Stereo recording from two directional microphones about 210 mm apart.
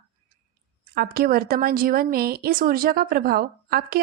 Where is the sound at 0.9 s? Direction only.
45° right (ahead or behind).